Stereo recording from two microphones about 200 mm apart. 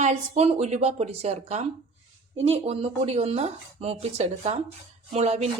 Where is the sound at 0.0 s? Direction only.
35° right (ahead or behind).